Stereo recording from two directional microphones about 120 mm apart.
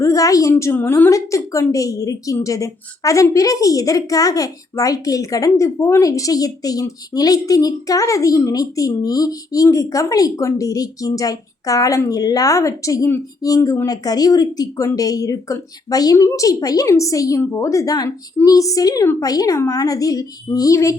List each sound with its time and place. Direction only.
0.0 s a woman's voice: 30° left (ahead or behind)
0.5 s a woman's voice: 15° left (ahead or behind)